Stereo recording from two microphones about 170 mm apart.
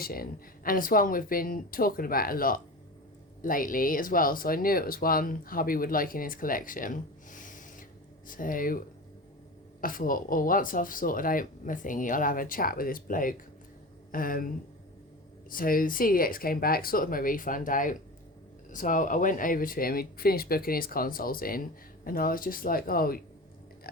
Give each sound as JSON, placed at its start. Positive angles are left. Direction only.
{"t": 0.0, "sound": "speech", "side_deg": 60}
{"t": 9.8, "sound": "speech", "side_deg": 55}
{"t": 23.9, "sound": "pig", "side_deg": 60}